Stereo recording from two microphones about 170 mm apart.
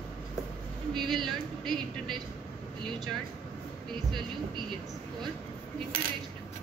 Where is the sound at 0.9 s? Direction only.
Centre (ahead or behind).